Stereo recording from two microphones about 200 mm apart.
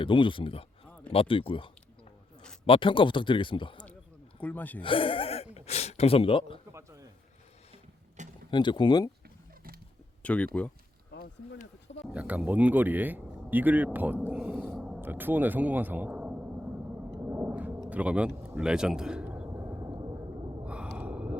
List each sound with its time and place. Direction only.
0.0 s speech: 25° left (ahead or behind)
4.4 s a man's voice: 10° left (ahead or behind)
4.8 s speech: 25° left (ahead or behind)
6.7 s a sound: 15° right (ahead or behind)
8.4 s speech: 20° left (ahead or behind)
10.2 s speech: 5° left (ahead or behind)
11.1 s a sound: 45° left (ahead or behind)
12.1 s speech: 5° right (ahead or behind)
17.2 s a sound: 10° right (ahead or behind)
17.8 s speech: 5° right (ahead or behind)
20.7 s gasp: 5° right (ahead or behind)